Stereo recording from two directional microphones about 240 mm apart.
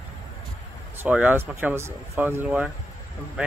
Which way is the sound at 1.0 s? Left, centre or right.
Centre.